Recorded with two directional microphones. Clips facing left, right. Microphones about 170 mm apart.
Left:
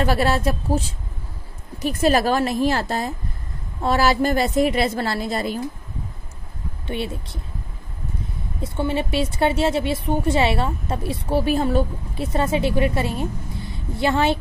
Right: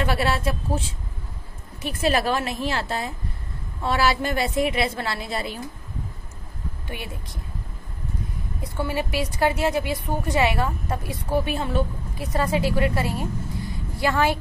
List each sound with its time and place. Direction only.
0.0 s a woman's voice: 40° left (ahead or behind)
6.9 s a woman's voice: 25° left (ahead or behind)
8.7 s a woman's voice: 25° left (ahead or behind)
12.3 s a woman's voice: 25° left (ahead or behind)